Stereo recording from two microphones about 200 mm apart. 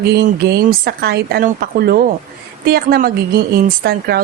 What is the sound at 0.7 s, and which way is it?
A woman's voice, 50° right (ahead or behind).